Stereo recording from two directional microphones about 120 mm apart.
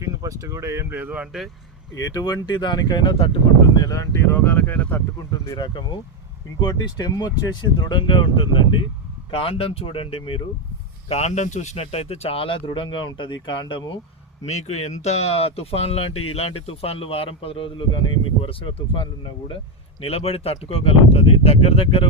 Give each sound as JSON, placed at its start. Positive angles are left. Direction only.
{"t": 0.0, "sound": "speech", "side_deg": -25}
{"t": 2.0, "sound": "speech", "side_deg": 30}
{"t": 3.8, "sound": "speech", "side_deg": 25}
{"t": 5.5, "sound": "a man's voice", "side_deg": 40}
{"t": 11.1, "sound": "a man's voice", "side_deg": 65}
{"t": 14.4, "sound": "a man's voice", "side_deg": 65}